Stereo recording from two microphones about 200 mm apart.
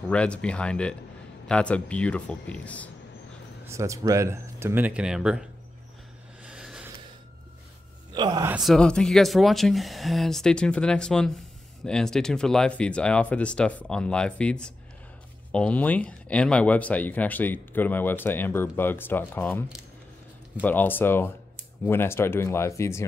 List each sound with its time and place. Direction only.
0.1 s speech: 5° left (ahead or behind)
3.6 s speech: 15° right (ahead or behind)
6.4 s a sound: 5° right (ahead or behind)
8.1 s a man's voice: 20° right (ahead or behind)
8.5 s speech: centre (ahead or behind)
20.6 s speech: 10° left (ahead or behind)